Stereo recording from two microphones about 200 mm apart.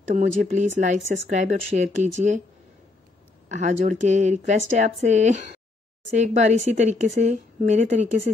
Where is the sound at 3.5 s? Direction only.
35° right (ahead or behind).